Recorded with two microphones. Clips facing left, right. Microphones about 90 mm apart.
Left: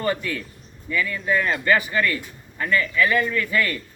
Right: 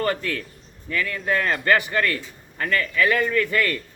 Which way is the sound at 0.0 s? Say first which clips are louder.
Even; 60° right (ahead or behind).